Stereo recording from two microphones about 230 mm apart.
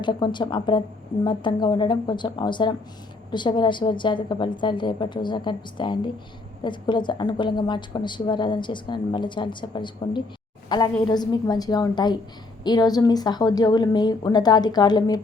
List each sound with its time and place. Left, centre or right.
0.0 s a woman's voice: centre